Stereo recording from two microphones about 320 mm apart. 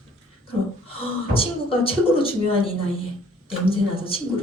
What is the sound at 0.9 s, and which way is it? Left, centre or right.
Speech, centre.